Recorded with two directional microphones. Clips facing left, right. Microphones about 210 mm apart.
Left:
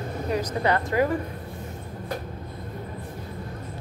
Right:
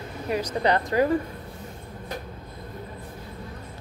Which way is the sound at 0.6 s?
35° right (ahead or behind).